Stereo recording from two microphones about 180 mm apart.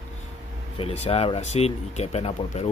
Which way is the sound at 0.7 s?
35° left (ahead or behind).